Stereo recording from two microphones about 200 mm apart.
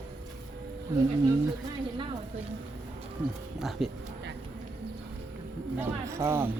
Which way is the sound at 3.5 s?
Centre (ahead or behind).